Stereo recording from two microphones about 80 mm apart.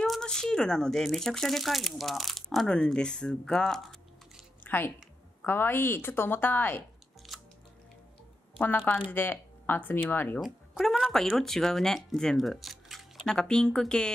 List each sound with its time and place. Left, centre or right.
0.0 s speech: centre
4.6 s a woman's voice: left
8.5 s a woman's voice: left
10.4 s a woman's voice: centre